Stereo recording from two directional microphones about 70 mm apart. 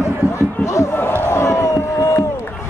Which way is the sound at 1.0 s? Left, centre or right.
Left.